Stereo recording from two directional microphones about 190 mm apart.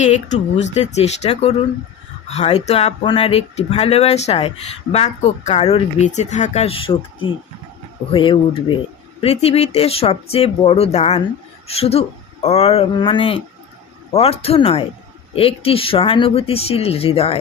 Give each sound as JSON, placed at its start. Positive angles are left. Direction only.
{"t": 0.0, "sound": "speech", "side_deg": 40}